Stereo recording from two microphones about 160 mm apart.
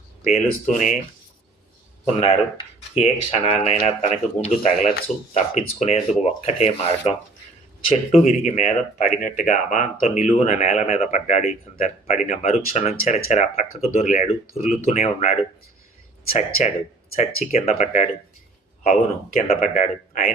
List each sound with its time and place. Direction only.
0.3 s speech: 45° left (ahead or behind)
2.2 s speech: 40° left (ahead or behind)
8.1 s speech: 50° left (ahead or behind)
17.2 s speech: 45° left (ahead or behind)